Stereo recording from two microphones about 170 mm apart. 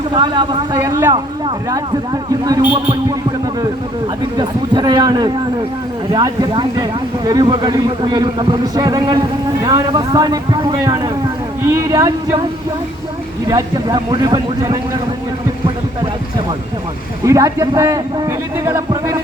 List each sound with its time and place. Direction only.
0.1 s a man's voice: 30° right (ahead or behind)
0.8 s speech: 15° right (ahead or behind)
1.1 s a man's voice: 25° right (ahead or behind)
4.4 s a man's voice: 25° right (ahead or behind)
13.5 s a man's voice: 25° right (ahead or behind)
17.2 s a man's voice: 20° right (ahead or behind)